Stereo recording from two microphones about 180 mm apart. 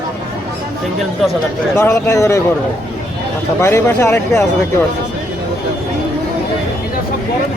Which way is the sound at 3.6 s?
15° left (ahead or behind).